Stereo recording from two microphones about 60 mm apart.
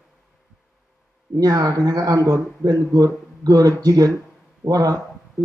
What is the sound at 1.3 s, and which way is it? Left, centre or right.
Speech, right.